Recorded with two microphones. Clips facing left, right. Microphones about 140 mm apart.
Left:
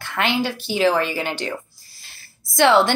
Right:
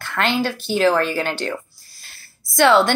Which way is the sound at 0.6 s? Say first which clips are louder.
Right 2 dB; 50° right (ahead or behind).